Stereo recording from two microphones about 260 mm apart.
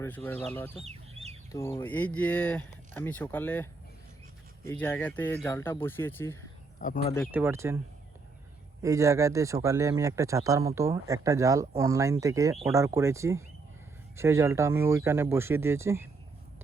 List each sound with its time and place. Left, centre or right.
0.3 s speech: centre
0.9 s chicken: right
1.5 s speech: centre
6.7 s speech: left
7.3 s a man's voice: centre
8.8 s a man's voice: centre